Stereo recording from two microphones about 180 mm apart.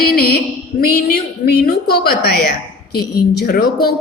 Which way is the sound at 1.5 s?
60° left (ahead or behind).